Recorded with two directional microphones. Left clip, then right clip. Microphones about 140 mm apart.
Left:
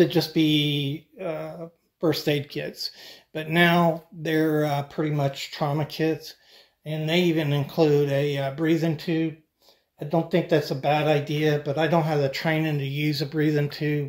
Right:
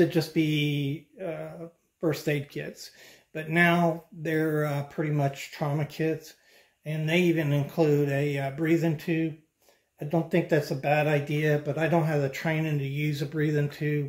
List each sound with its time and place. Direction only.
0.0 s speech: 40° left (ahead or behind)